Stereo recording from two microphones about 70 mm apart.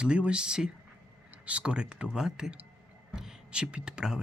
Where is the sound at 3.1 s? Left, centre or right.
Centre.